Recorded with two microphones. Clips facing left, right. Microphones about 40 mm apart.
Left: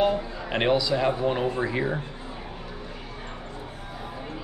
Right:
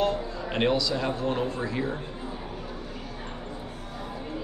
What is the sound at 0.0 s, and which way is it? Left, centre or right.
Speech, centre.